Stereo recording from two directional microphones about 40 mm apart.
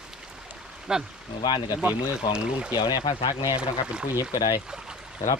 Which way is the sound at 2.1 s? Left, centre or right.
Right.